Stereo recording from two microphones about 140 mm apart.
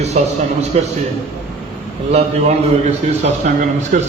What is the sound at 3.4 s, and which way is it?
Speech, 55° right (ahead or behind).